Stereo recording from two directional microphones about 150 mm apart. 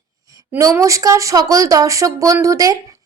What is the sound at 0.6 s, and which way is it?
Speech, 20° right (ahead or behind).